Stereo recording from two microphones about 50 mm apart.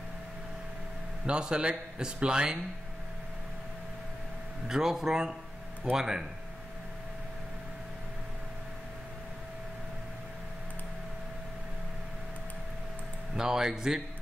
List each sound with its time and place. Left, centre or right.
1.2 s a man's voice: centre
4.6 s a man's voice: centre
13.4 s a man's voice: centre